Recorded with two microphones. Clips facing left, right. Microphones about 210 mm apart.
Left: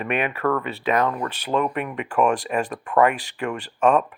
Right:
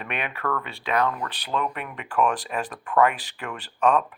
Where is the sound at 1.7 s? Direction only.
Centre (ahead or behind).